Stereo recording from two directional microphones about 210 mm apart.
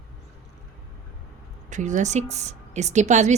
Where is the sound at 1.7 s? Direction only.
35° right (ahead or behind).